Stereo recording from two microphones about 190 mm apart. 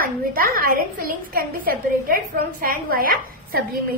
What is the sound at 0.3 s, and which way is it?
A woman's voice, 50° right (ahead or behind).